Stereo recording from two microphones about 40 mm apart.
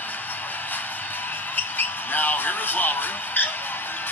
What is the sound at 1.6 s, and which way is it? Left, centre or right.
Basketball bounce, left.